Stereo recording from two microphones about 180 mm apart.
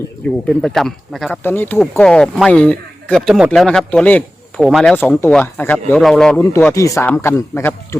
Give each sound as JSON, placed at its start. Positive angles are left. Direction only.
{"t": 0.4, "sound": "a man's voice", "side_deg": 0}